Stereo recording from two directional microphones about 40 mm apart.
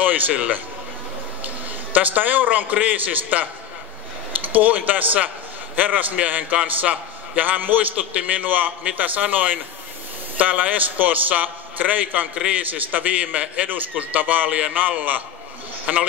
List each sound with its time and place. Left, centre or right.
0.3 s a man's voice: right
4.5 s a man's voice: right
8.1 s a man's voice: right
15.9 s a man's voice: right